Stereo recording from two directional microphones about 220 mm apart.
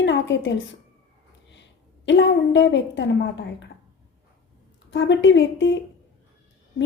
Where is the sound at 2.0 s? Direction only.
55° left (ahead or behind).